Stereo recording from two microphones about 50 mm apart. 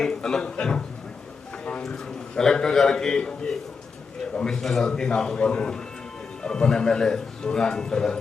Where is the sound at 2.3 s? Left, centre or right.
Centre.